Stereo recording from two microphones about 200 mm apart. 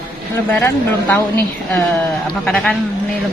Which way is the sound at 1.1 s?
10° left (ahead or behind).